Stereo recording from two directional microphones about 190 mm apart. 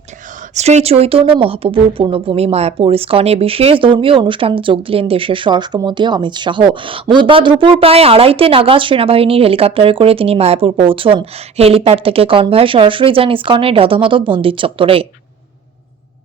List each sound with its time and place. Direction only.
0.5 s speech: 35° right (ahead or behind)